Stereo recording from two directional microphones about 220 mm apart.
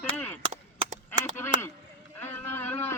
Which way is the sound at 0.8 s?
30° right (ahead or behind).